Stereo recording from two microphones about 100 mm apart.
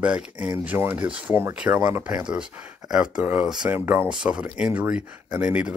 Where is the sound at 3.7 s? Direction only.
20° right (ahead or behind).